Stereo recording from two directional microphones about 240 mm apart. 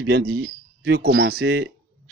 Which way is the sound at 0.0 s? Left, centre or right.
Right.